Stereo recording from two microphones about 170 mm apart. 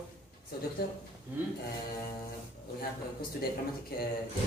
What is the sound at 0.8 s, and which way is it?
Speech, 65° left (ahead or behind).